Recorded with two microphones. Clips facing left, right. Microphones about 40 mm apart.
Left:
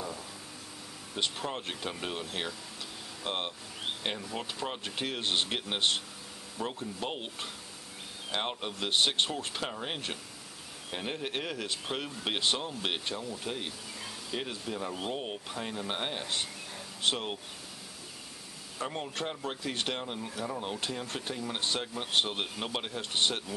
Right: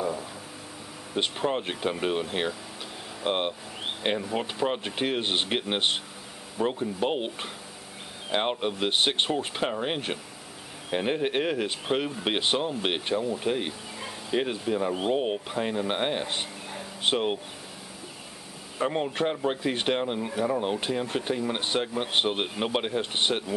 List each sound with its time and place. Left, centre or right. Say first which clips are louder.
1.1 s speech: right 7 dB; right
18.8 s speech: right 9 dB; right